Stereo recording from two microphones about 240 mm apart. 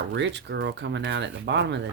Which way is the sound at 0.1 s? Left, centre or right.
Right.